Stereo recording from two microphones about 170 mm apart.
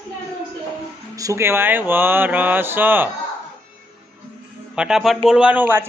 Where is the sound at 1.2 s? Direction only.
15° right (ahead or behind).